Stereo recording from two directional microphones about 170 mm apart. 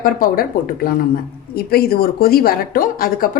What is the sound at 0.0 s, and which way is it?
Speech, 55° left (ahead or behind).